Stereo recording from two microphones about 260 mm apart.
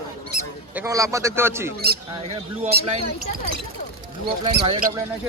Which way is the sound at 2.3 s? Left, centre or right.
Right.